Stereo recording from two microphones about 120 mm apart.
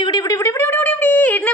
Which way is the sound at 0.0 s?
35° left (ahead or behind).